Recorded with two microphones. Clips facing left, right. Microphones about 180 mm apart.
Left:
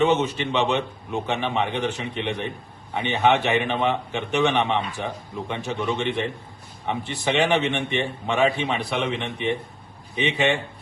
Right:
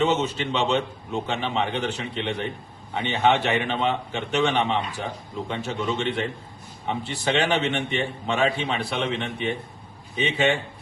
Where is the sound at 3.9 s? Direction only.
15° left (ahead or behind).